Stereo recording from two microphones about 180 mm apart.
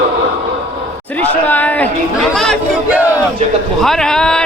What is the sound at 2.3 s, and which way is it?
Chatter, 5° left (ahead or behind).